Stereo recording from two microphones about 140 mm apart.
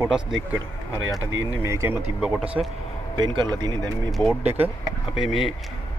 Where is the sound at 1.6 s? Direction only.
20° right (ahead or behind).